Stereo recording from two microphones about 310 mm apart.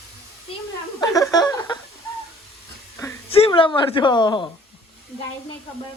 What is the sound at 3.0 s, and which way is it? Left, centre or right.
A woman's voice, centre.